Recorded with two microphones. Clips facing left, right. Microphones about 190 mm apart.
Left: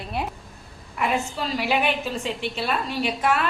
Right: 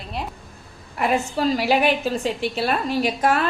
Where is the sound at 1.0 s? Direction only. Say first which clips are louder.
Right 4 dB; 40° right (ahead or behind).